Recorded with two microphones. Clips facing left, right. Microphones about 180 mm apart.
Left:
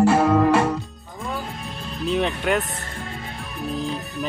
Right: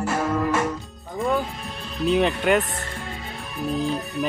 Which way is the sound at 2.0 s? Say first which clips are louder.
Right 3 dB; centre (ahead or behind).